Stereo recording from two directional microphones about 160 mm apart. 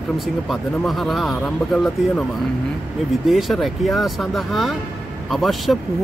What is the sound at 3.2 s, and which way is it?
Speech, centre (ahead or behind).